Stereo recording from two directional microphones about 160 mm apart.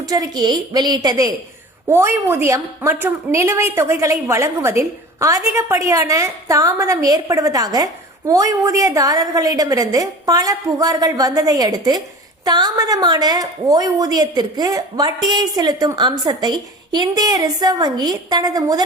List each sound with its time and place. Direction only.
0.0 s a woman's voice: 20° right (ahead or behind)